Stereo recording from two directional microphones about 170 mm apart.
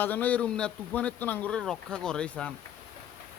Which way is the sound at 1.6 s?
5° left (ahead or behind).